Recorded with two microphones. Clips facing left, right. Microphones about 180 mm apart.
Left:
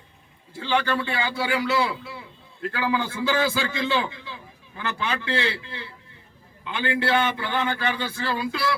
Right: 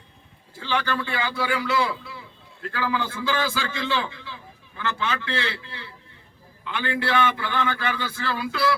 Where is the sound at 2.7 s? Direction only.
15° left (ahead or behind).